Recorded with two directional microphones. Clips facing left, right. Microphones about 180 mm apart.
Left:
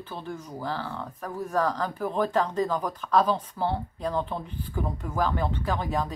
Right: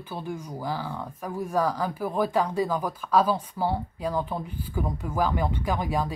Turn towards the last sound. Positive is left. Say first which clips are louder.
# right 1 dB
turn(degrees=-10)  # may be behind; listen again after turning